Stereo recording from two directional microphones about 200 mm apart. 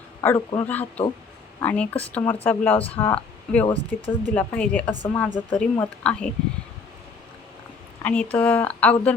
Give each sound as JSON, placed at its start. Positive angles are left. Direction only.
{"t": 0.2, "sound": "speech", "side_deg": 15}
{"t": 3.9, "sound": "speech", "side_deg": 45}
{"t": 4.4, "sound": "a woman's voice", "side_deg": 5}
{"t": 8.0, "sound": "speech", "side_deg": 5}